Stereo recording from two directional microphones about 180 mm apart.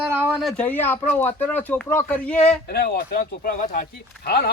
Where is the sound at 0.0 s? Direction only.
10° right (ahead or behind).